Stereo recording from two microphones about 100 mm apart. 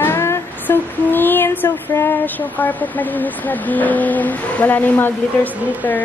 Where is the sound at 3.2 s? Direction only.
15° left (ahead or behind).